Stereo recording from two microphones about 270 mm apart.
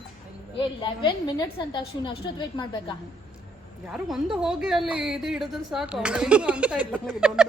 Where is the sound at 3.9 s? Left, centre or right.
Centre.